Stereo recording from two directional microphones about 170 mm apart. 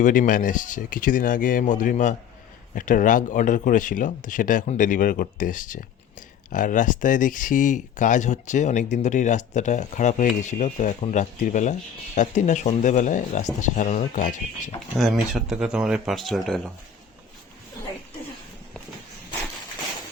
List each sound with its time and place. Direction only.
0.0 s speech: 50° left (ahead or behind)
14.9 s speech: centre (ahead or behind)